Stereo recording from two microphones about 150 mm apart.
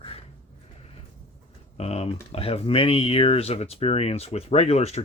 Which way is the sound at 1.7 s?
45° left (ahead or behind).